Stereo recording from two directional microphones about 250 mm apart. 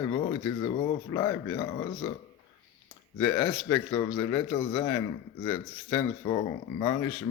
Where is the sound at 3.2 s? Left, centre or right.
Centre.